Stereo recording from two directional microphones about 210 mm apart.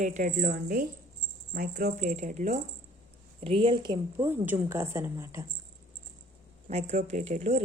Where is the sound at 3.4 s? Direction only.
25° right (ahead or behind).